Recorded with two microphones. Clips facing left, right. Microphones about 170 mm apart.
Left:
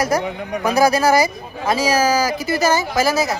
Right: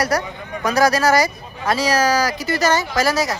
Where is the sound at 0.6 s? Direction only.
10° left (ahead or behind).